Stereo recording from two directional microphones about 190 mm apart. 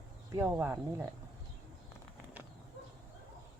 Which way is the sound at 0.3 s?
15° right (ahead or behind).